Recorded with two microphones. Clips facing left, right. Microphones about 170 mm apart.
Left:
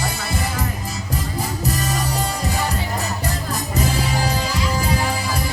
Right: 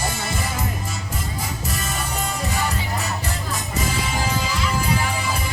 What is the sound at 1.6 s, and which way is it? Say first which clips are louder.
Music: left 5 dB; 35° left (ahead or behind).